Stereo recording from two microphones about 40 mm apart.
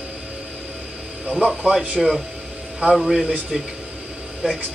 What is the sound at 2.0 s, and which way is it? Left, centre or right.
A man's voice, centre.